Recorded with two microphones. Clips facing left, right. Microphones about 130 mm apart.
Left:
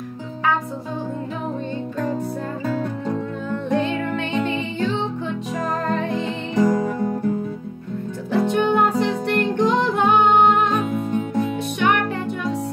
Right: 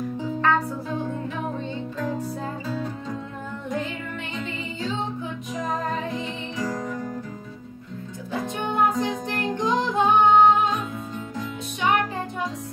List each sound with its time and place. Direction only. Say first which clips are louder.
2.6 s music: left 6 dB; 60° left (ahead or behind)
4.4 s music: left 7 dB; 70° left (ahead or behind)
8.3 s music: left 10 dB; 75° left (ahead or behind)